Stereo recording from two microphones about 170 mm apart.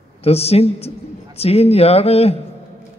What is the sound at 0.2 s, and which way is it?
A man's voice, 35° left (ahead or behind).